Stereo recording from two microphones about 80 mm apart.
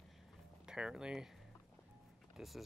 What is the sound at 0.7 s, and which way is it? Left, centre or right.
Speech, centre.